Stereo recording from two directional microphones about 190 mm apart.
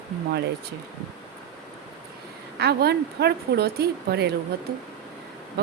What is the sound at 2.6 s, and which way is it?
Speech, 60° right (ahead or behind).